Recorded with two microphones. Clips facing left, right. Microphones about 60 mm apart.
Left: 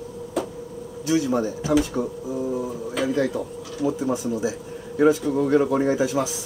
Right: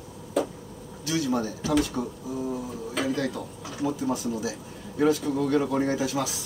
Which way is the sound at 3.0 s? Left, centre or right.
Left.